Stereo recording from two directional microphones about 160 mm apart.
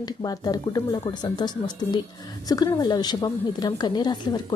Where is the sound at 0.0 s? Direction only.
25° left (ahead or behind).